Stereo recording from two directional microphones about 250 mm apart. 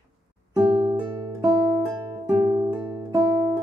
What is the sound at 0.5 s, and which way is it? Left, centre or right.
Music, centre.